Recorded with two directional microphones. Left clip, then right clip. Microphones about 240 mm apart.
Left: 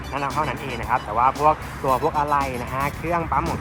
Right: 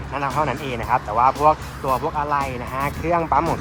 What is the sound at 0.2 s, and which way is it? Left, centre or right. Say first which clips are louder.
Speech: right 3 dB; centre.